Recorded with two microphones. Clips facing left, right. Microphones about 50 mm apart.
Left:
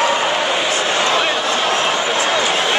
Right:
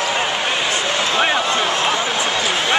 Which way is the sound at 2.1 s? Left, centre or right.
Left.